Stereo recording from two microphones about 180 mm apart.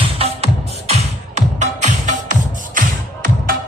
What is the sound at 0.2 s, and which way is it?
Music, 35° right (ahead or behind).